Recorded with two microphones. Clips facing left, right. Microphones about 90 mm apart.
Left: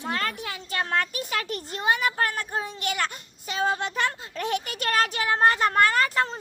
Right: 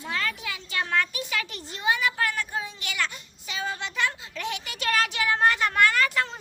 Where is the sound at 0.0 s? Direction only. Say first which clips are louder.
Left 2 dB; 45° left (ahead or behind).